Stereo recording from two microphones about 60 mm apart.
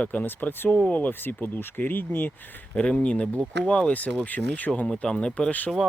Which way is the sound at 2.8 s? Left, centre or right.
Centre.